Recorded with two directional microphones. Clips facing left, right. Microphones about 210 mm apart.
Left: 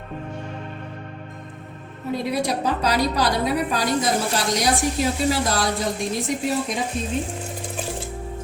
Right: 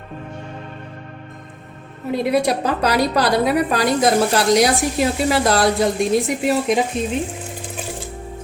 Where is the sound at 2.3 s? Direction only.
60° right (ahead or behind).